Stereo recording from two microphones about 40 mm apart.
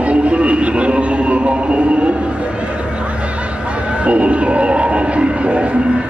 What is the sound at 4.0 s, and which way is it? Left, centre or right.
Music, right.